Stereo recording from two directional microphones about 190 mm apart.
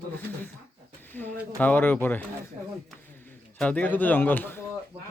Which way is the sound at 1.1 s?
10° left (ahead or behind).